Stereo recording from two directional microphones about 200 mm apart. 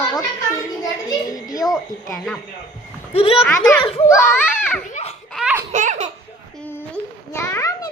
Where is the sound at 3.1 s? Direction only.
30° left (ahead or behind).